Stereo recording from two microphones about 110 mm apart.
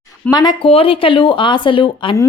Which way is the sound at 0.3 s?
35° left (ahead or behind).